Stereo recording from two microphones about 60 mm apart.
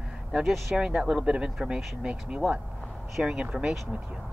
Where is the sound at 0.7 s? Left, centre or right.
Centre.